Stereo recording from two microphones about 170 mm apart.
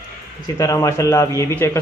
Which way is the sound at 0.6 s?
20° left (ahead or behind).